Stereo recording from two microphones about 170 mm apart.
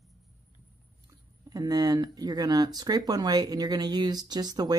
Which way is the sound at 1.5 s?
20° right (ahead or behind).